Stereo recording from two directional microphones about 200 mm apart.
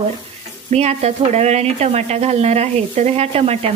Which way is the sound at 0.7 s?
35° right (ahead or behind).